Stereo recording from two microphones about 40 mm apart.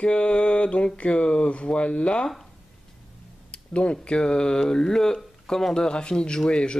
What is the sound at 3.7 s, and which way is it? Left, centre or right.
Speech, left.